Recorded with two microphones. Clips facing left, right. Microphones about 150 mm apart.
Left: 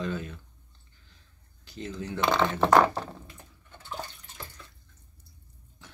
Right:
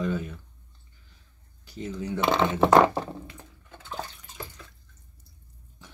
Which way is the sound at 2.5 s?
20° right (ahead or behind).